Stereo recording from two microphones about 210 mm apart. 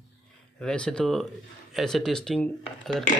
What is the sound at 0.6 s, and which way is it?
Speech, 5° left (ahead or behind).